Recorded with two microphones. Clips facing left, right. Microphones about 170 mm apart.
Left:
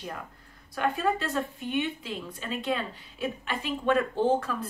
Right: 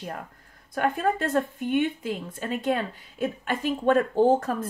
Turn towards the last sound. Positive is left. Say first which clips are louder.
# right 5 dB
turn(degrees=-45)  # may be behind; listen again after turning